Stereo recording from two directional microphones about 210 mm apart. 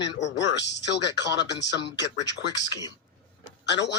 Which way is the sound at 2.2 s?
20° left (ahead or behind).